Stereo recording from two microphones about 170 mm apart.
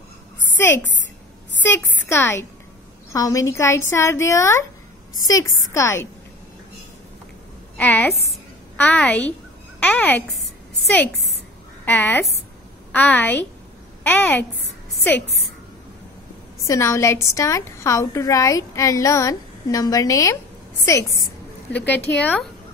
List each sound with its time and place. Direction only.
0.6 s a woman's voice: 15° left (ahead or behind)
7.7 s a woman's voice: 10° left (ahead or behind)
16.6 s a woman's voice: 20° left (ahead or behind)